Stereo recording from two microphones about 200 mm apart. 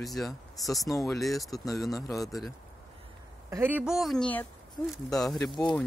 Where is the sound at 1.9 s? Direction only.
15° left (ahead or behind).